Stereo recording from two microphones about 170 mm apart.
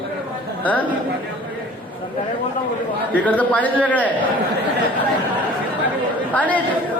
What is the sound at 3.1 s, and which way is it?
Speech, 10° left (ahead or behind).